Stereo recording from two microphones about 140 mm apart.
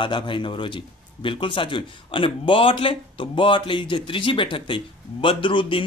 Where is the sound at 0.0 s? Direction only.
35° left (ahead or behind).